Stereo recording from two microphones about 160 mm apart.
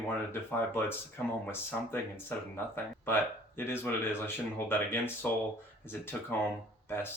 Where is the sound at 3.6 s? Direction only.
15° left (ahead or behind).